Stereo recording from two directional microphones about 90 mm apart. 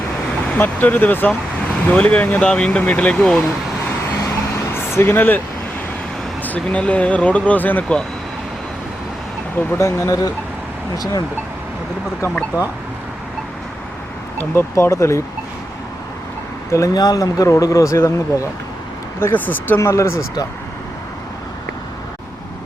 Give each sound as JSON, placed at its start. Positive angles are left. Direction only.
{"t": 0.5, "sound": "speech", "side_deg": 20}
{"t": 4.7, "sound": "vehicle", "side_deg": 30}
{"t": 6.4, "sound": "speech", "side_deg": 15}
{"t": 9.7, "sound": "speech", "side_deg": 35}
{"t": 12.5, "sound": "speech", "side_deg": -20}
{"t": 14.3, "sound": "speech", "side_deg": 30}
{"t": 16.7, "sound": "speech", "side_deg": 35}
{"t": 17.0, "sound": "speech", "side_deg": 50}
{"t": 19.2, "sound": "speech", "side_deg": 20}
{"t": 19.8, "sound": "speech", "side_deg": 35}